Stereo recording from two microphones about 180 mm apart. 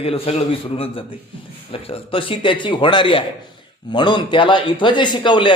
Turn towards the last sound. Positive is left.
turn(degrees=25)  # may be behind; listen again after turning